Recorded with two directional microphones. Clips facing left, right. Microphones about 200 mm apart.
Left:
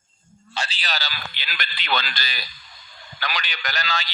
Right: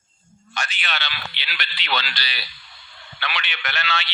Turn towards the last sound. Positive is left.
turn(degrees=40)  # may be behind; listen again after turning